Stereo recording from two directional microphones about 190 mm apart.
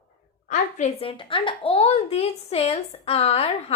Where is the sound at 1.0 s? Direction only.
30° left (ahead or behind).